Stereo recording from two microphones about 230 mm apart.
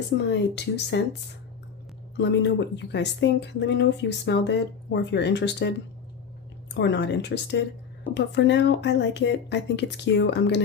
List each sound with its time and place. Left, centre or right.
0.3 s speech: left
2.1 s speech: left
6.7 s speech: left